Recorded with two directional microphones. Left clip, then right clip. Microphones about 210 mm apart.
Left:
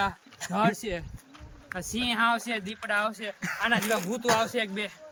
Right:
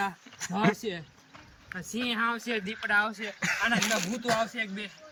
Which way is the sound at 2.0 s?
35° left (ahead or behind).